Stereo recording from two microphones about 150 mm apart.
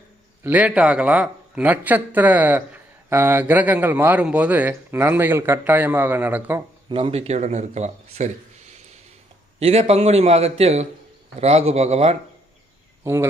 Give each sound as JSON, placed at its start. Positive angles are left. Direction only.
{"t": 0.4, "sound": "speech", "side_deg": -10}
{"t": 6.8, "sound": "speech", "side_deg": -35}